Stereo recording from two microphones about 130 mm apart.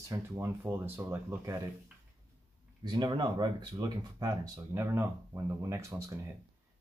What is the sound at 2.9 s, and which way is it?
Speech, 35° right (ahead or behind).